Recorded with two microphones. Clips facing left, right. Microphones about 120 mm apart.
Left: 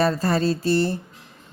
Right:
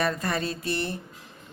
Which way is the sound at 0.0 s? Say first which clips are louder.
Left 7 dB; 30° left (ahead or behind).